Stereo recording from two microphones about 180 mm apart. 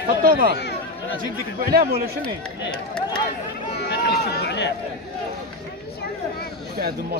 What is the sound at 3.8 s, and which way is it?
Run, 70° left (ahead or behind).